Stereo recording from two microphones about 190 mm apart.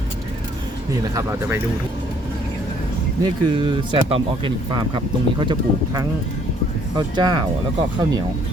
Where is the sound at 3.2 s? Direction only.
25° right (ahead or behind).